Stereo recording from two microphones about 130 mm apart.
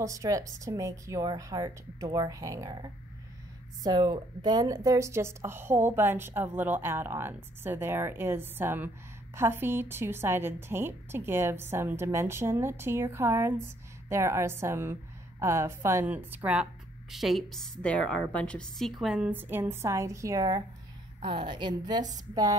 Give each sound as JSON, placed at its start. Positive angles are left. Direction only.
{"t": 0.0, "sound": "a woman's voice", "side_deg": -25}
{"t": 17.1, "sound": "a woman's voice", "side_deg": 0}
{"t": 21.2, "sound": "a woman's voice", "side_deg": -40}